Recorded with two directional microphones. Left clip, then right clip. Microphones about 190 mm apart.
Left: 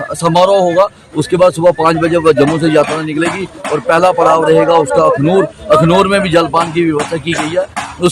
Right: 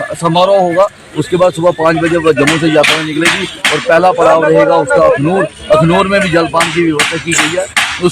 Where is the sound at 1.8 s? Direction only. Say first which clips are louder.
Even; 20° left (ahead or behind).